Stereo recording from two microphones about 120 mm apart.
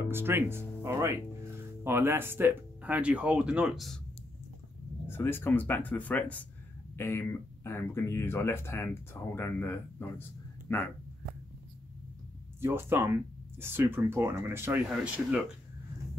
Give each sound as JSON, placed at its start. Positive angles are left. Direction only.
{"t": 0.0, "sound": "speech", "side_deg": -20}
{"t": 5.0, "sound": "speech", "side_deg": 20}
{"t": 12.5, "sound": "speech", "side_deg": -20}